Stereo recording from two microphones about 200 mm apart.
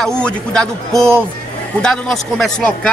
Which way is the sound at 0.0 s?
5° left (ahead or behind).